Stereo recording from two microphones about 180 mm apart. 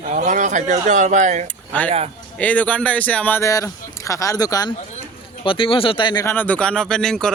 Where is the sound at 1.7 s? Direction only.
10° left (ahead or behind).